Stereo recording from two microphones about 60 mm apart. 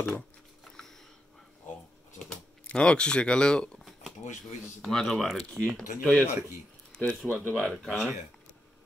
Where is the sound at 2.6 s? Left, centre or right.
Centre.